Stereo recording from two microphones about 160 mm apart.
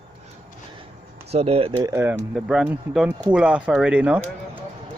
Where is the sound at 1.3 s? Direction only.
40° right (ahead or behind).